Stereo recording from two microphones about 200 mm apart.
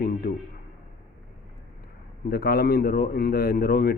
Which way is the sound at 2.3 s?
50° left (ahead or behind).